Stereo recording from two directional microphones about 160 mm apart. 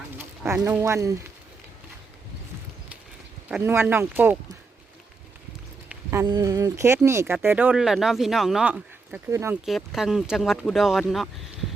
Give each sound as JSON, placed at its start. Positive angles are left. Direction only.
{"t": 0.2, "sound": "speech", "side_deg": -15}
{"t": 3.6, "sound": "speech", "side_deg": -15}
{"t": 6.2, "sound": "speech", "side_deg": -25}
{"t": 9.6, "sound": "speech", "side_deg": 0}